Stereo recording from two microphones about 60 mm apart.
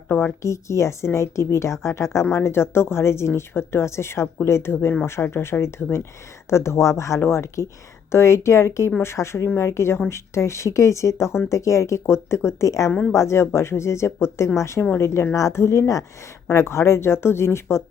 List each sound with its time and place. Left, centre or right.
0.1 s speech: left
0.4 s speech: left
12.9 s speech: left
13.1 s speech: left